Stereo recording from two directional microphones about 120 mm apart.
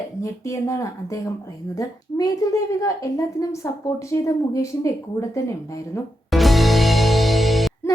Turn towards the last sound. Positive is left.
turn(degrees=0)  # may be behind; listen again after turning